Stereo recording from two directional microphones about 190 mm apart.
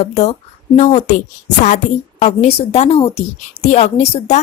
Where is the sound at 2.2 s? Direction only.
35° left (ahead or behind).